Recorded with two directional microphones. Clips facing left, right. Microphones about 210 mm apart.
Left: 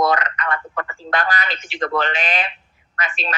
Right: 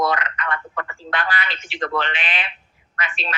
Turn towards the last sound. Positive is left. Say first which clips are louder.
# left 2 dB
turn(degrees=40)  # may be behind; listen again after turning